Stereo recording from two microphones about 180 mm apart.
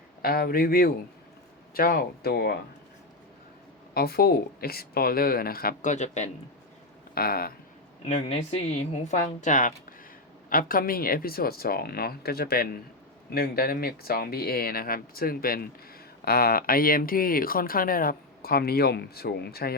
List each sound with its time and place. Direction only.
0.2 s speech: 55° left (ahead or behind)
3.9 s speech: 60° left (ahead or behind); by 6.3 s 40° left (ahead or behind)
7.1 s speech: 55° left (ahead or behind)
8.0 s speech: 35° left (ahead or behind); by 19.7 s 60° left (ahead or behind)